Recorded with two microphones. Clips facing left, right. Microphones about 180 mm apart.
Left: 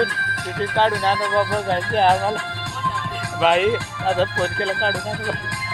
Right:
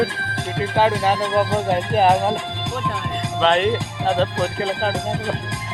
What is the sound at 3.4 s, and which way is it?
Speech, 5° left (ahead or behind).